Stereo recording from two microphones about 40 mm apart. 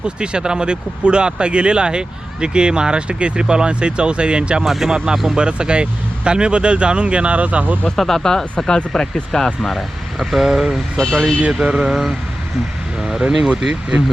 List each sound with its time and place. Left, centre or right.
0.2 s speech: right
4.6 s speech: centre
5.1 s speech: centre
5.4 s speech: right
7.9 s speech: centre
9.6 s speech: centre
10.9 s speech: centre
11.3 s mantra: right
11.7 s speech: right
13.0 s speech: centre